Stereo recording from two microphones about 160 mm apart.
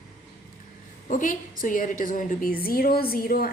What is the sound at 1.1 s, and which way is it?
A woman's voice, 55° left (ahead or behind).